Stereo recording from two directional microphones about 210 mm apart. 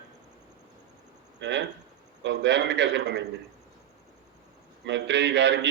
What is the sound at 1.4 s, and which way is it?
A man's voice, 55° right (ahead or behind).